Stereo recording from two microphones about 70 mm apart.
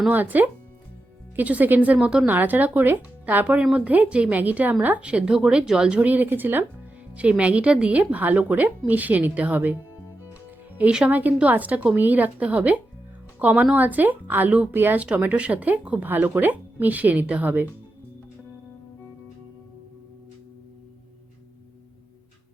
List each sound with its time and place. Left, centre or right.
0.1 s a woman's voice: right
2.2 s a woman's voice: right
6.0 s a woman's voice: right
11.1 s a woman's voice: right